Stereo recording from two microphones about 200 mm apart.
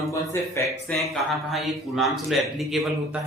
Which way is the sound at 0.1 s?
15° left (ahead or behind).